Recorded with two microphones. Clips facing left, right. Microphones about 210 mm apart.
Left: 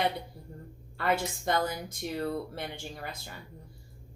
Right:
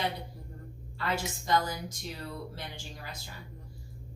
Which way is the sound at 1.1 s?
55° left (ahead or behind).